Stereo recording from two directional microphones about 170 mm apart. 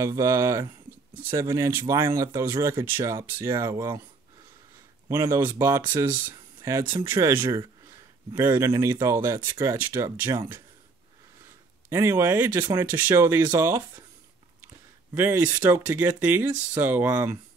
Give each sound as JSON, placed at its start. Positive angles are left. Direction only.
{"t": 0.0, "sound": "speech", "side_deg": -15}
{"t": 5.0, "sound": "speech", "side_deg": -15}
{"t": 11.9, "sound": "speech", "side_deg": -15}
{"t": 15.1, "sound": "speech", "side_deg": -15}